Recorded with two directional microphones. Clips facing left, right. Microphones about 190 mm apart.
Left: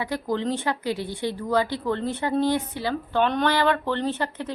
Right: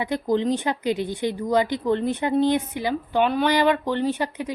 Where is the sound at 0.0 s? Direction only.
20° right (ahead or behind).